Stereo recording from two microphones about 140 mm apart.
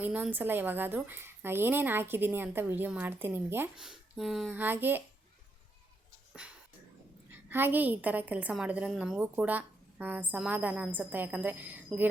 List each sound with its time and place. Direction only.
0.0 s a woman's voice: 10° right (ahead or behind)
3.8 s speech: centre (ahead or behind)
4.5 s a woman's voice: 15° right (ahead or behind)
7.3 s a woman's voice: 15° right (ahead or behind)